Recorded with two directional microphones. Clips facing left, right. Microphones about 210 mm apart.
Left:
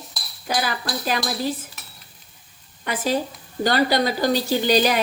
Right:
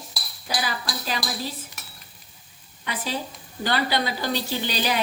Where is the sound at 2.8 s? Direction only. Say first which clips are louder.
Left 7 dB; 45° left (ahead or behind).